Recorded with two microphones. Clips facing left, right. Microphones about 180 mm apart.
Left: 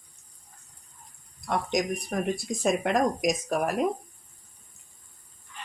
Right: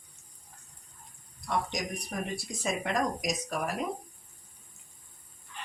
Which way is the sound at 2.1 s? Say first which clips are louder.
Left 6 dB; 60° left (ahead or behind).